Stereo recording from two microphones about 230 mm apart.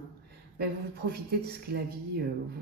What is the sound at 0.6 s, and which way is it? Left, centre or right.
Speech, right.